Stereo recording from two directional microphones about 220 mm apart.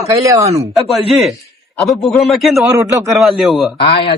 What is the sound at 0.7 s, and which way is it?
Speech, centre (ahead or behind).